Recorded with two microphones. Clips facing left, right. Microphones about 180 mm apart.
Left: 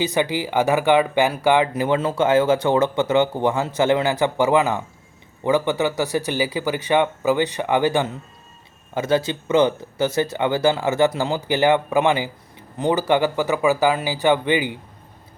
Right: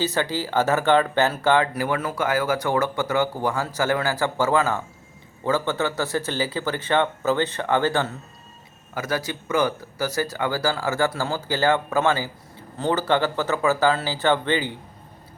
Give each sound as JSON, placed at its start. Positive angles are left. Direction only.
{"t": 0.0, "sound": "speech", "side_deg": 15}
{"t": 9.0, "sound": "speech", "side_deg": 25}